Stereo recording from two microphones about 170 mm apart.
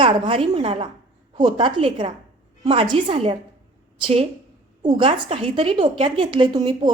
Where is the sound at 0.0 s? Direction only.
35° right (ahead or behind).